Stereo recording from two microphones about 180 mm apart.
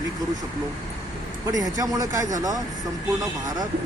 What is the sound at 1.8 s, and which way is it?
Speech, 20° right (ahead or behind).